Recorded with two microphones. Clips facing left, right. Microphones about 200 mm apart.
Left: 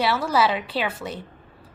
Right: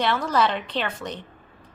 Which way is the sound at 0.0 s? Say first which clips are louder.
Left 1 dB; 5° left (ahead or behind).